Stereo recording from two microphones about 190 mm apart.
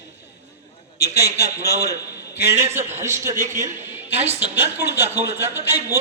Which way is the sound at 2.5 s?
35° right (ahead or behind).